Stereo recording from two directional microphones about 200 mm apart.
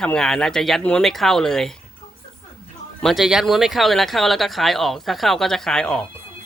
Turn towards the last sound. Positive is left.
turn(degrees=5)  # may be behind; listen again after turning